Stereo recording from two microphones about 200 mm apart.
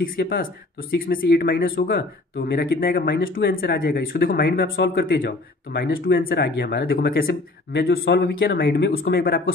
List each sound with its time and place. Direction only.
0.0 s speech: 45° left (ahead or behind)